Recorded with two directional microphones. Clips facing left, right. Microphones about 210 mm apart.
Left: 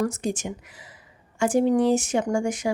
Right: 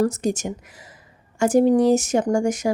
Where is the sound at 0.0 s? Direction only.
40° right (ahead or behind).